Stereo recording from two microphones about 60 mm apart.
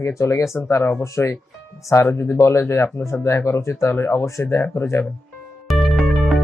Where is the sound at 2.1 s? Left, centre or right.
Left.